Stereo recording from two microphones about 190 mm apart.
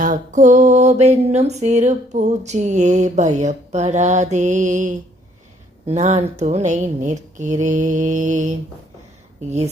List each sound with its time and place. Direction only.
0.0 s mantra: 45° right (ahead or behind)